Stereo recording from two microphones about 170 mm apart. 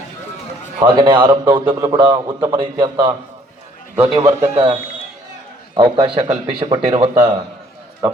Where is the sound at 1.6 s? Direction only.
20° right (ahead or behind).